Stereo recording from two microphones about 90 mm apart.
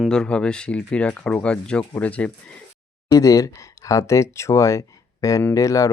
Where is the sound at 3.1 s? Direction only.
35° left (ahead or behind).